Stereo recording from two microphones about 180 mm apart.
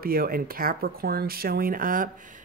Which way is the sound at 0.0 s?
55° right (ahead or behind).